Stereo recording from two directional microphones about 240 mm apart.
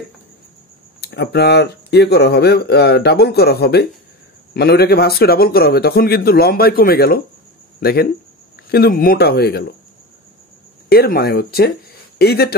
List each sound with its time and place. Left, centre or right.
1.0 s a man's voice: left
10.9 s a man's voice: left